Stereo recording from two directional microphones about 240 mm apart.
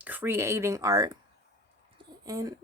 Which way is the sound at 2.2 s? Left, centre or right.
Centre.